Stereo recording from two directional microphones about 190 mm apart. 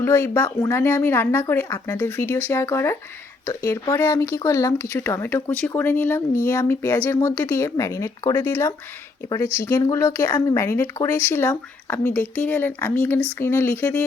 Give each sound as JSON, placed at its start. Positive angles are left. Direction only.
{"t": 0.0, "sound": "speech", "side_deg": 15}